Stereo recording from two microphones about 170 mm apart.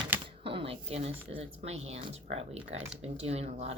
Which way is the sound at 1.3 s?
40° right (ahead or behind).